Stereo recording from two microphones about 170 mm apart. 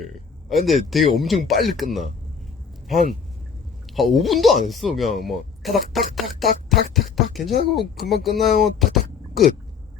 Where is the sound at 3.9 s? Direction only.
Centre (ahead or behind).